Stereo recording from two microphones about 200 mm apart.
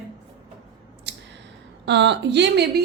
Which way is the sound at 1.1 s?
60° right (ahead or behind).